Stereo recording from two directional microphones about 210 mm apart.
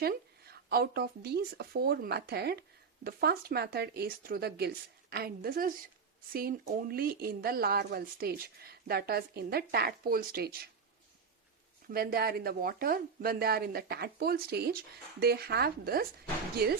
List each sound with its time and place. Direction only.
0.0 s speech: 45° right (ahead or behind)
11.9 s speech: 45° right (ahead or behind)